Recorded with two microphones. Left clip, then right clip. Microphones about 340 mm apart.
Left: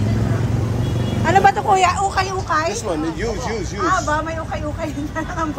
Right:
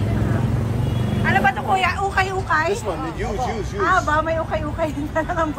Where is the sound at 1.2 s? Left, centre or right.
Centre.